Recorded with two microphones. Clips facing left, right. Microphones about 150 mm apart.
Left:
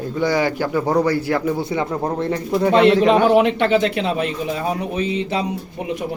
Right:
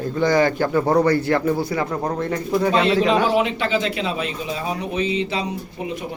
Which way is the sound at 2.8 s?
60° left (ahead or behind).